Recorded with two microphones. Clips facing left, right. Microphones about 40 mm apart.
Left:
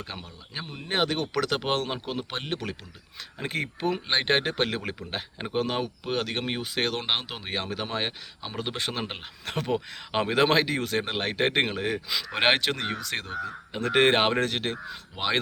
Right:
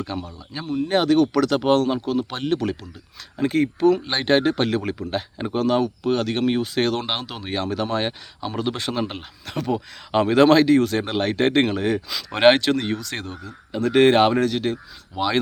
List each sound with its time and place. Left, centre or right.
0.2 s speech: left
9.5 s speech: left
10.1 s speech: centre
13.4 s speech: left
14.3 s speech: left
15.1 s speech: centre